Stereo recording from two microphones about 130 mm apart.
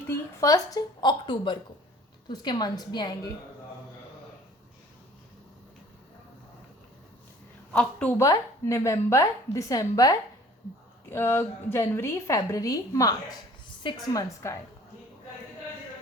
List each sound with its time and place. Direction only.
0.1 s a woman's voice: 25° left (ahead or behind)
7.7 s a woman's voice: 10° left (ahead or behind)
8.2 s a woman's voice: 25° left (ahead or behind)